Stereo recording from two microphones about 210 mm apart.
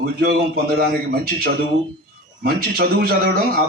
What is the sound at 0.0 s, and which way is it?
A man's voice, 45° right (ahead or behind).